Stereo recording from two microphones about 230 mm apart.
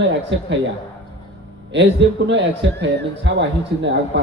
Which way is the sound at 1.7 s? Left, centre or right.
Right.